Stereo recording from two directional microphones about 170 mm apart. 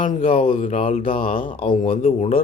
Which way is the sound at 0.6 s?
55° left (ahead or behind).